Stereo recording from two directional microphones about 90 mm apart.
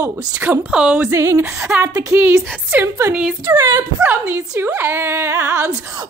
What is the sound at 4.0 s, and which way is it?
A woman's voice, 25° right (ahead or behind).